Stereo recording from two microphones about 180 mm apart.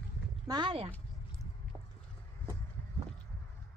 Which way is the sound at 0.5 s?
25° right (ahead or behind).